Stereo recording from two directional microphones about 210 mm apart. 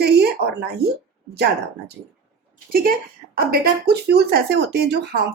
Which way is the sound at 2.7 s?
45° right (ahead or behind).